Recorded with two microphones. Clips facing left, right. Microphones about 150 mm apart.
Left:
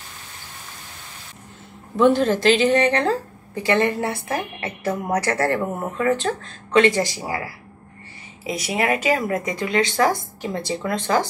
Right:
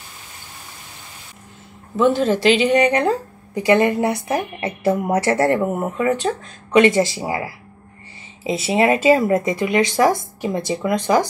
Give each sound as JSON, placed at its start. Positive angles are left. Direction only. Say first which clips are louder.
{"t": 2.0, "sound": "a woman's voice", "louder": "even", "side_deg": -5}